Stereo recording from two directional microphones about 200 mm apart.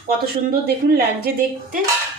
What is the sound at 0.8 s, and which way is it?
Speech, 50° right (ahead or behind).